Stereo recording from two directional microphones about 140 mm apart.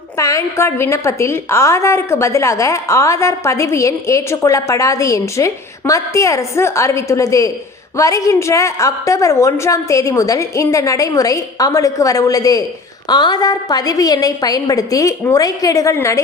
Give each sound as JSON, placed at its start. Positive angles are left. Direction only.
{"t": 0.2, "sound": "a woman's voice", "side_deg": 20}